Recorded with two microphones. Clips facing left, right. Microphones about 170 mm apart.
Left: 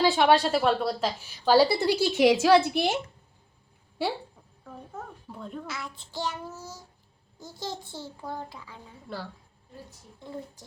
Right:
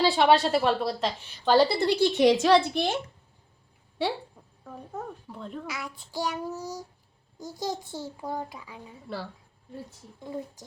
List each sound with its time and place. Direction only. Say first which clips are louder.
0.0 s a woman's voice: even; centre (ahead or behind)
5.3 s a woman's voice: even; centre (ahead or behind)
5.6 s child singing: right 1 dB; 15° right (ahead or behind)
7.9 s a child's voice: right 3 dB; 40° right (ahead or behind)
8.2 s child singing: right 2 dB; 15° right (ahead or behind)
9.0 s a woman's voice: right 1 dB; centre (ahead or behind)